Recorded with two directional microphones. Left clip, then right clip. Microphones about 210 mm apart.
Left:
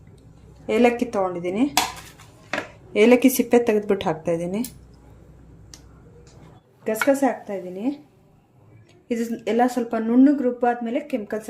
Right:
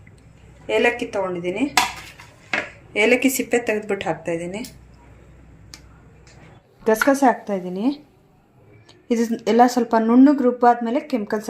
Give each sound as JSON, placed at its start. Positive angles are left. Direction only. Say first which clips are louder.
{"t": 0.7, "sound": "a woman's voice", "louder": "even", "side_deg": 55}
{"t": 2.9, "sound": "speech", "louder": "left 1 dB", "side_deg": 50}
{"t": 6.8, "sound": "speech", "louder": "right 4 dB", "side_deg": -30}
{"t": 9.0, "sound": "speech", "louder": "right 4 dB", "side_deg": -25}